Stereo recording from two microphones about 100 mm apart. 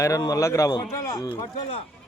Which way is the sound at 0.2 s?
35° left (ahead or behind).